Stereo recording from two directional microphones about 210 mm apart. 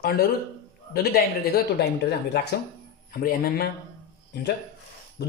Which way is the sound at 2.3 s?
50° left (ahead or behind).